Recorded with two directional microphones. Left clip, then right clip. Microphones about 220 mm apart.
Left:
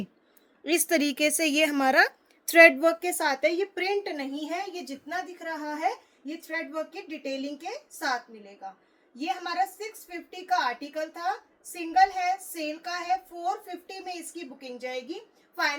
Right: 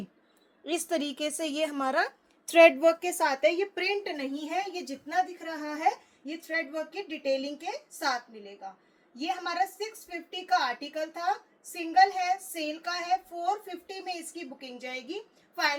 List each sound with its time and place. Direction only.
0.6 s a woman's voice: 35° left (ahead or behind); by 15.1 s 10° left (ahead or behind)